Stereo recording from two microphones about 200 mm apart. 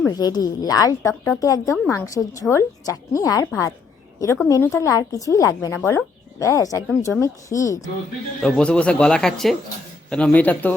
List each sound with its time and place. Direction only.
0.0 s a woman's voice: 20° left (ahead or behind)
8.4 s a woman's voice: 5° left (ahead or behind)